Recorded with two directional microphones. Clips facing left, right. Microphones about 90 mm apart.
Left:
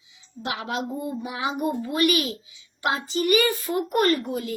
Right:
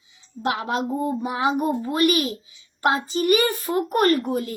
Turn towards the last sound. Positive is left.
turn(degrees=-40)  # may be behind; listen again after turning